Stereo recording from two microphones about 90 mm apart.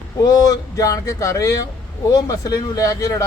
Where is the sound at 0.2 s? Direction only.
40° left (ahead or behind).